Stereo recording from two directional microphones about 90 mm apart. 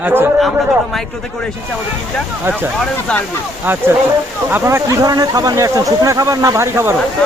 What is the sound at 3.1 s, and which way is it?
Speech, 10° left (ahead or behind).